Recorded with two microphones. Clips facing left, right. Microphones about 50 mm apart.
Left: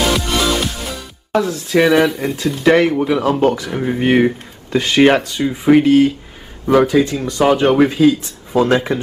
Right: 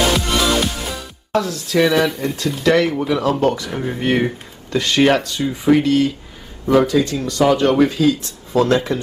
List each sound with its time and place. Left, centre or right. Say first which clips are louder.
1.3 s speech: left 3 dB; centre
2.0 s speech: left 3 dB; centre
2.6 s speech: left 3 dB; left